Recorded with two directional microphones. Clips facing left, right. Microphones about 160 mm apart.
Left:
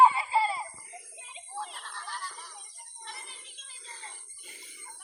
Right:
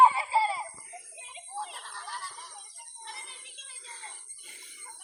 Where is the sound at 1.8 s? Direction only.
25° right (ahead or behind).